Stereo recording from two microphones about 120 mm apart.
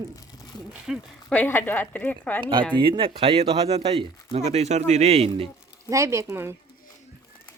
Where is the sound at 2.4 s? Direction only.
45° right (ahead or behind).